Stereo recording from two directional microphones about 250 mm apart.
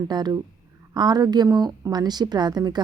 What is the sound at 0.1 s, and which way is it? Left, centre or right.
A woman's voice, centre.